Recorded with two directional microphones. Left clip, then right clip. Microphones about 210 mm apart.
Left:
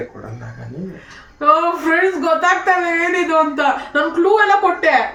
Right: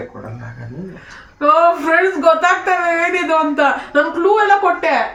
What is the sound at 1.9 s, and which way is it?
A woman's voice, 15° right (ahead or behind).